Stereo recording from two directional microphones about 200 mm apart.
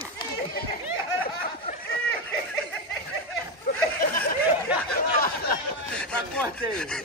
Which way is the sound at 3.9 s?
45° left (ahead or behind).